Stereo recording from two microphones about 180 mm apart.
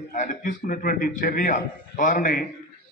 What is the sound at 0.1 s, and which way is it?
A man's voice, 45° left (ahead or behind).